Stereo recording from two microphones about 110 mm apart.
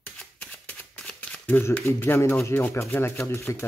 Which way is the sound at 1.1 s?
10° left (ahead or behind).